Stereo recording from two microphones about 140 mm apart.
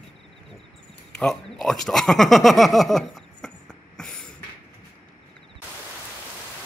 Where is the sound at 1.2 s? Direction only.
5° left (ahead or behind).